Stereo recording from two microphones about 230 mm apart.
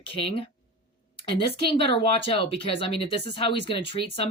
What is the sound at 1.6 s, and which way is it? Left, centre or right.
Speech, left.